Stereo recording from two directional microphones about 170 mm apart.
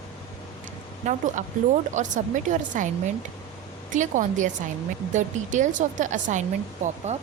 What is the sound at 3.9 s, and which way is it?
Speech, 45° right (ahead or behind).